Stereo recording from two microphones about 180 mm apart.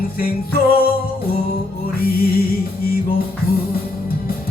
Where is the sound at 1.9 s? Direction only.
55° left (ahead or behind).